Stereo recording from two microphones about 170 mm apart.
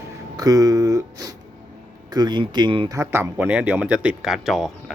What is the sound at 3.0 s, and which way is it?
Speech, 15° right (ahead or behind).